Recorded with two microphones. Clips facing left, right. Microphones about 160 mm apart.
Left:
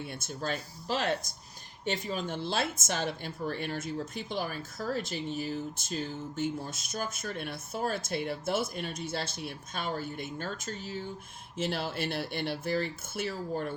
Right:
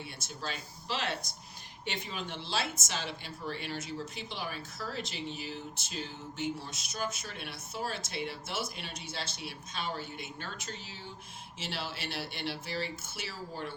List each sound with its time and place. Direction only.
0.0 s speech: 50° left (ahead or behind)